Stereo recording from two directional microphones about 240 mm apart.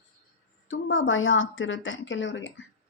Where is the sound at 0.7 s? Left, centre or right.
Left.